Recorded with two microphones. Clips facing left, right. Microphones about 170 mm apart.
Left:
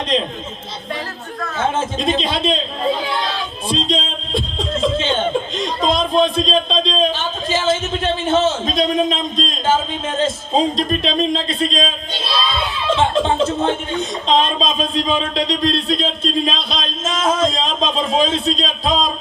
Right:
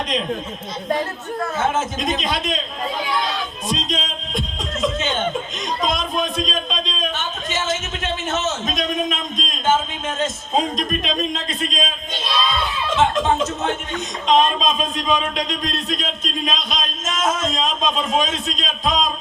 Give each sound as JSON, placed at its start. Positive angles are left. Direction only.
{"t": 2.0, "sound": "a man's voice", "side_deg": 30}
{"t": 3.7, "sound": "chuckle", "side_deg": 30}
{"t": 10.2, "sound": "speech", "side_deg": 30}
{"t": 13.0, "sound": "speech", "side_deg": 30}